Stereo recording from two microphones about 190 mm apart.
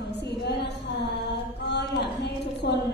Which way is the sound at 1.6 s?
60° left (ahead or behind).